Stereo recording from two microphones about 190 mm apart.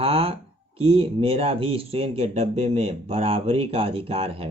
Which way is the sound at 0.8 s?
30° right (ahead or behind).